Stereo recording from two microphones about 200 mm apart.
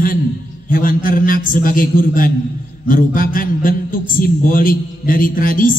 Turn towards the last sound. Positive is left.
turn(degrees=45)  # may be behind; listen again after turning